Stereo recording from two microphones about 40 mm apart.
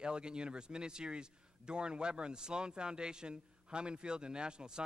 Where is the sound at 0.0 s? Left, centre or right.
Right.